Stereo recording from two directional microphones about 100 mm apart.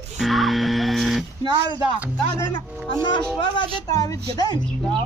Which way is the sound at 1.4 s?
50° right (ahead or behind).